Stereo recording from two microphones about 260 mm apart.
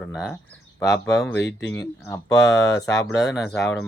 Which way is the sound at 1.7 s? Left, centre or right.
Centre.